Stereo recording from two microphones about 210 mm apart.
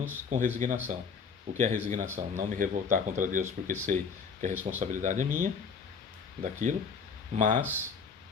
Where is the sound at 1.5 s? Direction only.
35° right (ahead or behind).